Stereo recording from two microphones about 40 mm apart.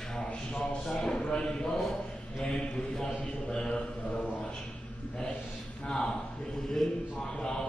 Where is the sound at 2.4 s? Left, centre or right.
Left.